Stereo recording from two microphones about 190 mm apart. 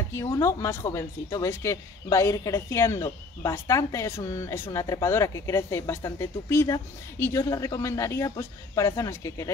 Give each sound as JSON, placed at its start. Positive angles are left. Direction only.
{"t": 0.1, "sound": "speech", "side_deg": 15}